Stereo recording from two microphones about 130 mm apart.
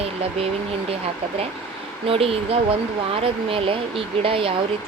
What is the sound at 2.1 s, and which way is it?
Speech, 45° right (ahead or behind).